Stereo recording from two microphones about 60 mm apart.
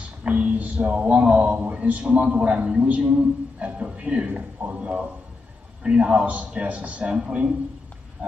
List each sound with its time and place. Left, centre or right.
0.2 s speech: centre